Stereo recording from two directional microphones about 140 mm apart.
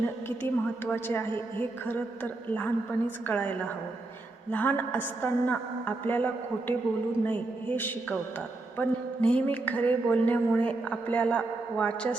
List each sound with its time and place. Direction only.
0.0 s a woman's voice: 15° left (ahead or behind)